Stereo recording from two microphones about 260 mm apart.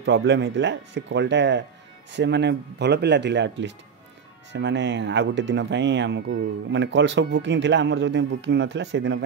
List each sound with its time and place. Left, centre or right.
0.0 s speech: right